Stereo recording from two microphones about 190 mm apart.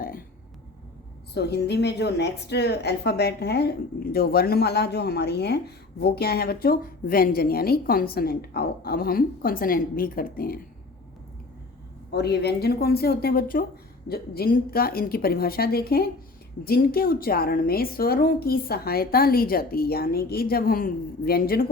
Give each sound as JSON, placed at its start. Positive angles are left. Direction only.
{"t": 1.3, "sound": "a woman's voice", "side_deg": 60}
{"t": 12.1, "sound": "a woman's voice", "side_deg": 60}